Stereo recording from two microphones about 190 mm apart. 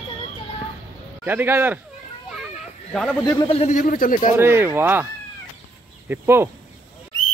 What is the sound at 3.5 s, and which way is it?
Speech, 35° left (ahead or behind).